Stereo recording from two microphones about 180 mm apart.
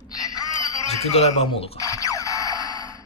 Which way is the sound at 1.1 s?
35° left (ahead or behind).